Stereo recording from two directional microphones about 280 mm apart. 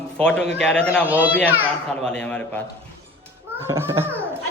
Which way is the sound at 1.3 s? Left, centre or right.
Centre.